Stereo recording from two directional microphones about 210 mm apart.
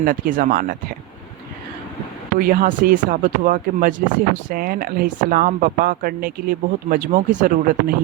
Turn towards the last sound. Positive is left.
turn(degrees=-40)  # may be behind; listen again after turning